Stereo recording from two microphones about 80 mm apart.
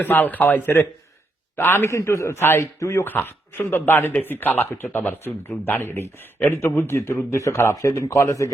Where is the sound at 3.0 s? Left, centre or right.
Left.